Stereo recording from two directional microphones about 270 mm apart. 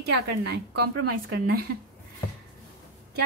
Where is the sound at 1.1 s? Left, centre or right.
Right.